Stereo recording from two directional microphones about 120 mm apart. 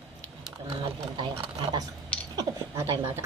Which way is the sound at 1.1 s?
40° right (ahead or behind).